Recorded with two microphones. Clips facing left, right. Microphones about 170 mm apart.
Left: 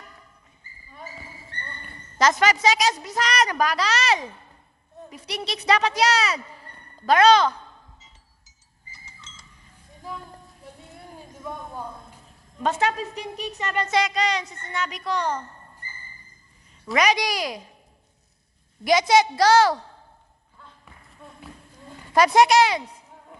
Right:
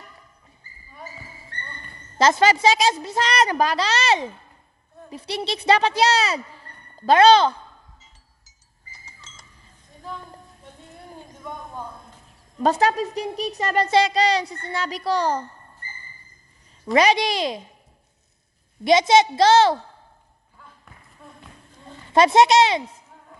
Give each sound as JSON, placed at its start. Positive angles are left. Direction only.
{"t": 2.1, "sound": "a woman's voice", "side_deg": -30}
{"t": 12.6, "sound": "speech", "side_deg": -35}
{"t": 16.8, "sound": "a woman's voice", "side_deg": -30}
{"t": 18.9, "sound": "a woman's voice", "side_deg": -25}
{"t": 20.5, "sound": "basketball bounce", "side_deg": -5}
{"t": 21.2, "sound": "a sound", "side_deg": 0}
{"t": 22.1, "sound": "a woman's voice", "side_deg": -25}